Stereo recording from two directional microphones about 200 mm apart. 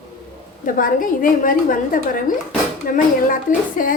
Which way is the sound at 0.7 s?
45° left (ahead or behind).